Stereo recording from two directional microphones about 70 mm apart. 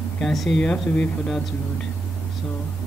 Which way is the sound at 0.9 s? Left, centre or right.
Centre.